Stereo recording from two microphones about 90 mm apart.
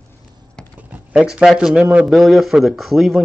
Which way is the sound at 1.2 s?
5° right (ahead or behind).